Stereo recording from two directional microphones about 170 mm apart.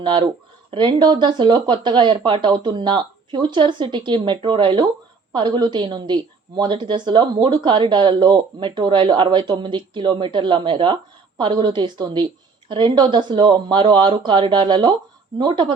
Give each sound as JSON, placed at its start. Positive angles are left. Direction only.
{"t": 0.0, "sound": "speech", "side_deg": -30}